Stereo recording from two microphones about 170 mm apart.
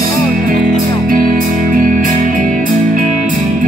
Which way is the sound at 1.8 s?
50° right (ahead or behind).